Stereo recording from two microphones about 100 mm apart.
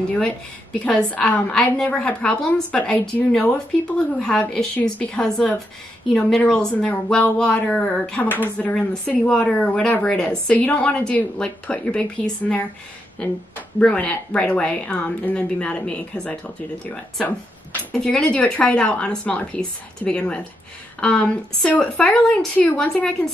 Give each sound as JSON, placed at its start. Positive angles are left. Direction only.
{"t": 0.7, "sound": "a woman's voice", "side_deg": 10}
{"t": 13.7, "sound": "a woman's voice", "side_deg": 10}